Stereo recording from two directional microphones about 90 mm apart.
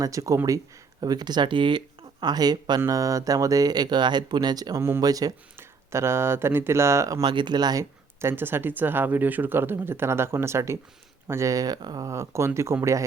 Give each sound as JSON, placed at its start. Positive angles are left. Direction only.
{"t": 0.0, "sound": "speech", "side_deg": -40}
{"t": 1.0, "sound": "speech", "side_deg": -50}
{"t": 2.2, "sound": "speech", "side_deg": -50}
{"t": 2.8, "sound": "speech", "side_deg": -40}
{"t": 5.5, "sound": "speech", "side_deg": -30}
{"t": 7.2, "sound": "speech", "side_deg": -55}
{"t": 8.2, "sound": "speech", "side_deg": -25}